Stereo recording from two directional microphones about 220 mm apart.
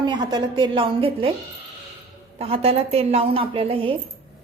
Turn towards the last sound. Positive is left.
turn(degrees=-25)  # may be behind; listen again after turning